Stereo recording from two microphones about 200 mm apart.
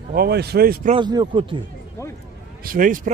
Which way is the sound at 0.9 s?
25° right (ahead or behind).